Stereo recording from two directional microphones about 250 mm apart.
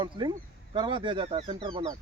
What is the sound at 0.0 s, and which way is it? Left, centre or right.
Speech, centre.